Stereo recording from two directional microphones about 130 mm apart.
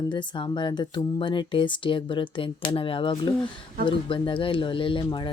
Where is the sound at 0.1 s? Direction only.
35° left (ahead or behind).